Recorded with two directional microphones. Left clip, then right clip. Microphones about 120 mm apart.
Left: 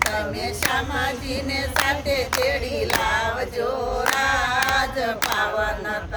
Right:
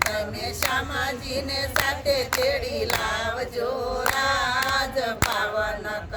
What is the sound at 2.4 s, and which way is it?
A capella, 45° right (ahead or behind).